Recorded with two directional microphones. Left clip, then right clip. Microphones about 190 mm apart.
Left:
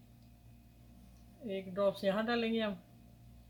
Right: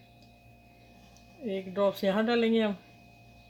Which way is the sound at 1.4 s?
45° right (ahead or behind).